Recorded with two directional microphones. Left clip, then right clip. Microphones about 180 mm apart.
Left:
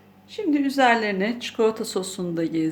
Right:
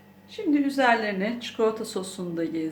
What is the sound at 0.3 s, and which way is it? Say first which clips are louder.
A woman's voice: left 1 dB; 55° left (ahead or behind).